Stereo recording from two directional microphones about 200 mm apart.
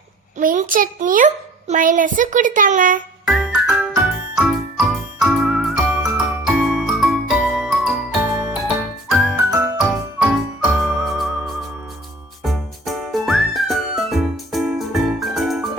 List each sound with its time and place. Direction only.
0.3 s a child's voice: 40° right (ahead or behind)
3.2 s music: centre (ahead or behind)
4.4 s jingle: 5° right (ahead or behind)
8.3 s music: 5° right (ahead or behind)
9.5 s jingle: 15° right (ahead or behind)
9.9 s music: 5° right (ahead or behind)
12.4 s whistle: centre (ahead or behind)